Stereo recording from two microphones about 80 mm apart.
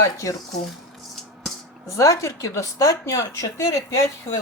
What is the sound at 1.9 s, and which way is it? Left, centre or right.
A woman's voice, left.